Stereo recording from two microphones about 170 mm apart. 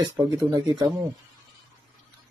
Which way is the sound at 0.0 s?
25° right (ahead or behind).